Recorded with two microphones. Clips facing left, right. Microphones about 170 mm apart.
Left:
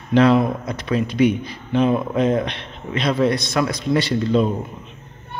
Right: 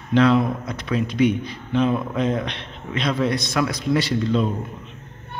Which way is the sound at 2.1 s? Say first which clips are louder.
Left 4 dB; 50° left (ahead or behind).